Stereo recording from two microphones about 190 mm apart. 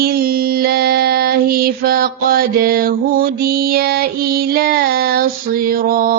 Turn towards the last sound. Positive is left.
turn(degrees=-50)  # may be behind; listen again after turning